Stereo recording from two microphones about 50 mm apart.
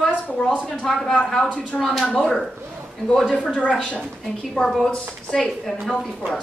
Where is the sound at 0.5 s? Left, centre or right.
Left.